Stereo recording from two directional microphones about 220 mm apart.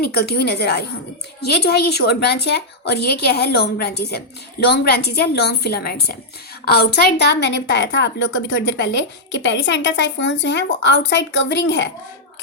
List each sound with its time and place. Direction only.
0.0 s a woman's voice: 45° left (ahead or behind)